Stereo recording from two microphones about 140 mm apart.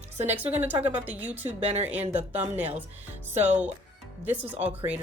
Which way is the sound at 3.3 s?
55° right (ahead or behind).